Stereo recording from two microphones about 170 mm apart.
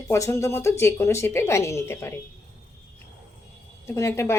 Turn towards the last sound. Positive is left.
turn(degrees=15)  # may be behind; listen again after turning